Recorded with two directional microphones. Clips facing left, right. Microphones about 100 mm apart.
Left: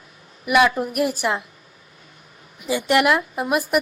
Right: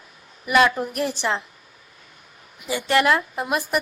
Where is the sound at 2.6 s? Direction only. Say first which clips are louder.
Left 1 dB; 15° left (ahead or behind).